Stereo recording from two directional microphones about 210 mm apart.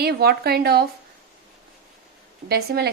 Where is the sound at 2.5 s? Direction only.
50° right (ahead or behind).